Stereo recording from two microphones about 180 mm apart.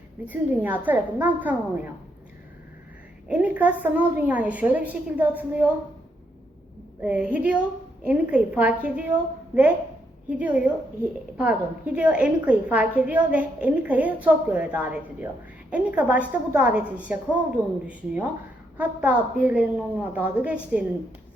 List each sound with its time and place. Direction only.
0.3 s a woman's voice: 10° right (ahead or behind)
3.2 s a woman's voice: 10° right (ahead or behind)
7.0 s a woman's voice: 5° right (ahead or behind)
10.2 s a woman's voice: 10° right (ahead or behind)